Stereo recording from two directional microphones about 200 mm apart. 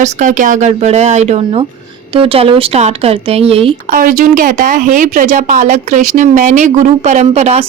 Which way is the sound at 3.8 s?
45° right (ahead or behind).